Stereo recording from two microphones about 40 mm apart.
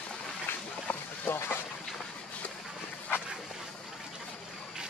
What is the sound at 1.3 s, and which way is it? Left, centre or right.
Boat, left.